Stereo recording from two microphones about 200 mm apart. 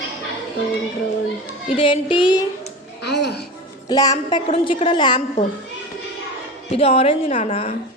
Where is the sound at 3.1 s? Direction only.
55° left (ahead or behind).